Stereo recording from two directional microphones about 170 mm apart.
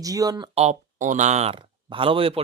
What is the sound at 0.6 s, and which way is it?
Speech, 45° right (ahead or behind).